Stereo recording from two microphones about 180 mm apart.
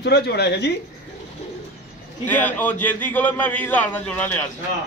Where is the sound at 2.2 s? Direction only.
10° left (ahead or behind).